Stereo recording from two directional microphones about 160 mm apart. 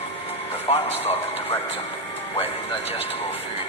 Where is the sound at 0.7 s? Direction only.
35° left (ahead or behind).